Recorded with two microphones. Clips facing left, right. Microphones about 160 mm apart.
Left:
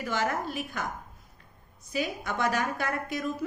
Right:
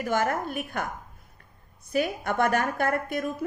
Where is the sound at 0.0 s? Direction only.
50° right (ahead or behind).